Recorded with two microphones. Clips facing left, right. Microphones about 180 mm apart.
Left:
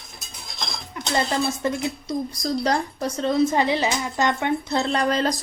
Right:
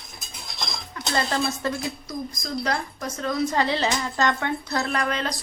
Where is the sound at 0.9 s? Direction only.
15° left (ahead or behind).